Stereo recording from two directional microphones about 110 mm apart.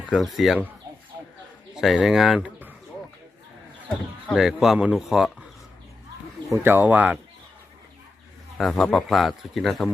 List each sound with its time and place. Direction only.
0.1 s speech: centre (ahead or behind)
1.7 s speech: centre (ahead or behind)
3.8 s speech: centre (ahead or behind)
6.5 s speech: 20° right (ahead or behind)
8.5 s speech: centre (ahead or behind)